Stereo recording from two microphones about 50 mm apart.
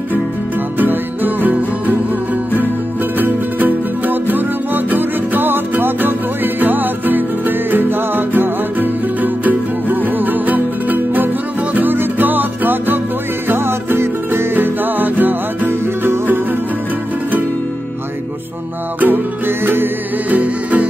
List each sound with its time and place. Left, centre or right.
0.7 s music: right
3.2 s music: right
14.5 s music: right
18.9 s music: right
20.2 s music: right